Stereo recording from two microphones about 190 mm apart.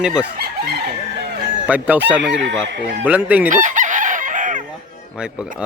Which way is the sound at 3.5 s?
40° right (ahead or behind).